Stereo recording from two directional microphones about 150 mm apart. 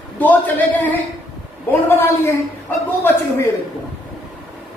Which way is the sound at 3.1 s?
15° left (ahead or behind).